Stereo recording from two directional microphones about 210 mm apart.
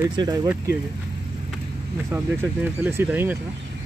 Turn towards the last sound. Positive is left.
turn(degrees=-10)  # may be behind; listen again after turning